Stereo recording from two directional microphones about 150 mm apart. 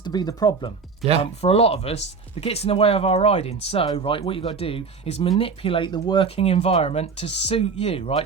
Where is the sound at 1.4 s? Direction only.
40° left (ahead or behind).